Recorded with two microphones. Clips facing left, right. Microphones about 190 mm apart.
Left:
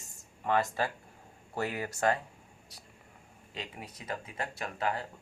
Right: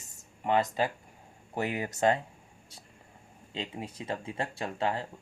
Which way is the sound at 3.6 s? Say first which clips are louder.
Right 6 dB; 25° right (ahead or behind).